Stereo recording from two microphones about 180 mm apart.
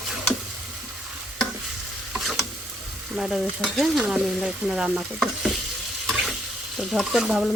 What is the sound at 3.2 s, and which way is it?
Stir, centre (ahead or behind).